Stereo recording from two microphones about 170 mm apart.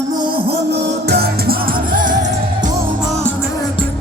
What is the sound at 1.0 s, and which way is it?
Music, 70° right (ahead or behind).